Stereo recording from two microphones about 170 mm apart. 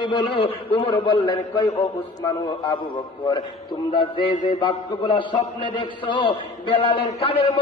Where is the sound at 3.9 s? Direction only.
30° left (ahead or behind).